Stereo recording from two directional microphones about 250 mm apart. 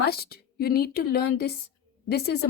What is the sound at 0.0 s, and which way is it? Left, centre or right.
Speech, left.